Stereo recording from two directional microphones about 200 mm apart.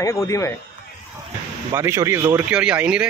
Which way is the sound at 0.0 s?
15° left (ahead or behind).